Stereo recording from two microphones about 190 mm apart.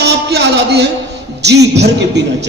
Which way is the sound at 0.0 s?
60° right (ahead or behind).